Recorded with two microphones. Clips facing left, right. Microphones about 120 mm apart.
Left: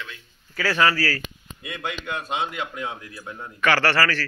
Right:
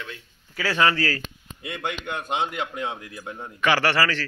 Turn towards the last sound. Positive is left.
turn(degrees=-15)  # may be behind; listen again after turning